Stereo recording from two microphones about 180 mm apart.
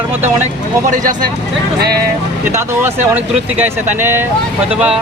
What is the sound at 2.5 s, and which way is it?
Speech, 10° right (ahead or behind).